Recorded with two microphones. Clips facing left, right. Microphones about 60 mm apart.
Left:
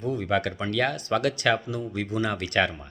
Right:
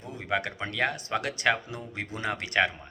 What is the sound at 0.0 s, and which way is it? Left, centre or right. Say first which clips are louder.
Speech: left 5 dB; centre.